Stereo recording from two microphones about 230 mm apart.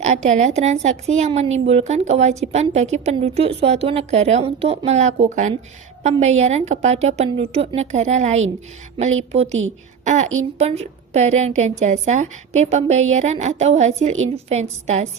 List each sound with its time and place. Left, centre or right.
0.0 s a woman's voice: right